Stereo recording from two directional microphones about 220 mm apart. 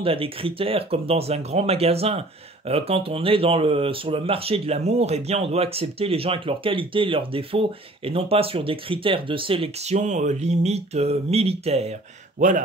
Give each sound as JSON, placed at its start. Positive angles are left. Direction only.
{"t": 0.0, "sound": "speech", "side_deg": -25}